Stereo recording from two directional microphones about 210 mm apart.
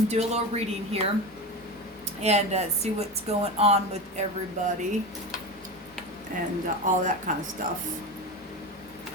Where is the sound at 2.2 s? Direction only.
30° right (ahead or behind).